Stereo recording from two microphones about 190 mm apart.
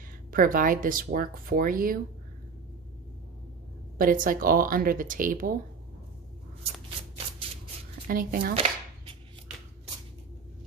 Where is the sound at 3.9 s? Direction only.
45° right (ahead or behind).